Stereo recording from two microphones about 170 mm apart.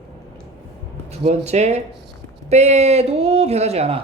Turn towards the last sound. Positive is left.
turn(degrees=-35)  # may be behind; listen again after turning